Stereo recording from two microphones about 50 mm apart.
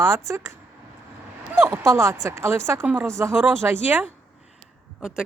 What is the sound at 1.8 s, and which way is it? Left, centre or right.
Speech, right.